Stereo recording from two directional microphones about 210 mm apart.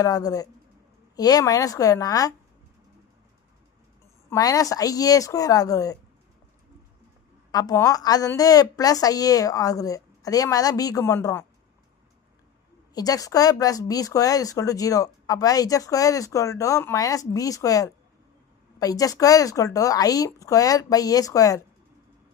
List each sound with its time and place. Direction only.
0.0 s speech: 15° left (ahead or behind)
4.3 s speech: 15° left (ahead or behind)
7.5 s speech: 15° left (ahead or behind)
12.9 s speech: 15° left (ahead or behind)